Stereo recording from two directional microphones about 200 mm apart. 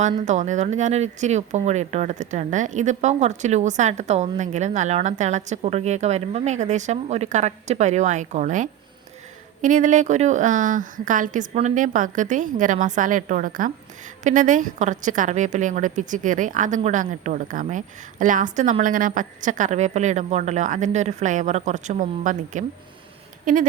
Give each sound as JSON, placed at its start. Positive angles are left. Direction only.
{"t": 0.2, "sound": "speech", "side_deg": -35}